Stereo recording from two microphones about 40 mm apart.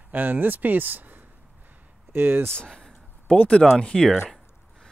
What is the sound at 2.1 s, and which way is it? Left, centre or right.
Speech, right.